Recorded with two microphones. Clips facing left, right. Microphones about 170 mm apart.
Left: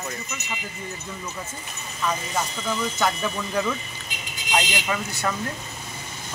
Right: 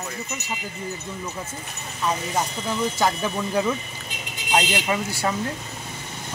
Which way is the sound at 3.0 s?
30° right (ahead or behind).